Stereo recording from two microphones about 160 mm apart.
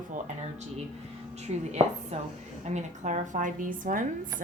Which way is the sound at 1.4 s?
45° right (ahead or behind).